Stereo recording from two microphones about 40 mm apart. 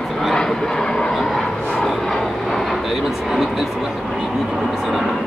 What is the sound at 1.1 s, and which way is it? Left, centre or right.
Vehicle, centre.